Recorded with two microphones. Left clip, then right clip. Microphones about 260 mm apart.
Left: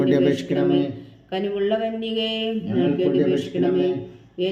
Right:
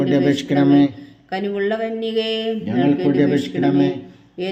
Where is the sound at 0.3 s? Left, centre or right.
Centre.